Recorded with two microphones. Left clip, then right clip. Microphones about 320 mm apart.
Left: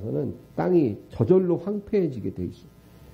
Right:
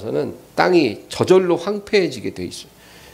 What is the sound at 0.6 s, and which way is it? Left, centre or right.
Speech, centre.